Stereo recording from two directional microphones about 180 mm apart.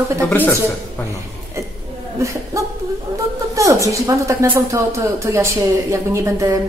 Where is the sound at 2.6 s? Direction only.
15° right (ahead or behind).